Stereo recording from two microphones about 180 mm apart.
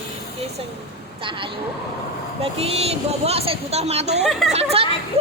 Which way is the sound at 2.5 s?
35° right (ahead or behind).